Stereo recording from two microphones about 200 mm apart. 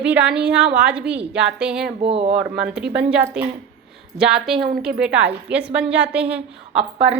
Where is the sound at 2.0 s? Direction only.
30° right (ahead or behind).